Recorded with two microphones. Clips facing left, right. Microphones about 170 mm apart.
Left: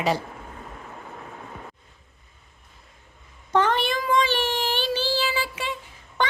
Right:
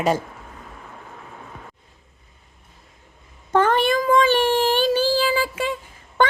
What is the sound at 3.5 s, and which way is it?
Child singing, 50° right (ahead or behind).